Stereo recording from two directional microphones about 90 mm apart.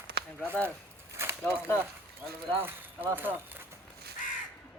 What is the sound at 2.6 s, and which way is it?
Clip-clop, 20° right (ahead or behind).